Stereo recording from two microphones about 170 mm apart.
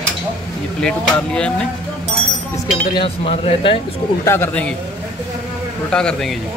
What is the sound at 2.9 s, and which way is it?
Speech, 30° left (ahead or behind).